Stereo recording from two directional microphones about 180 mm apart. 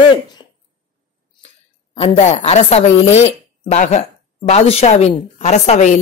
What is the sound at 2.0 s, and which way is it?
A woman's voice, 35° left (ahead or behind).